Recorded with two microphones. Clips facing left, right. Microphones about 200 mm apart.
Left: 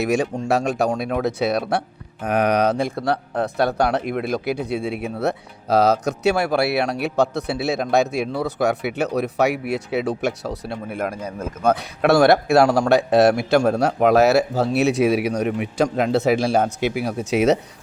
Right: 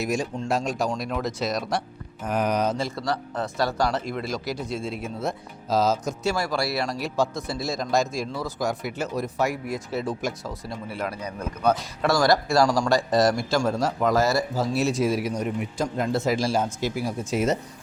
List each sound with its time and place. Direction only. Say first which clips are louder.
0.0 s speech: left 6 dB; 65° left (ahead or behind)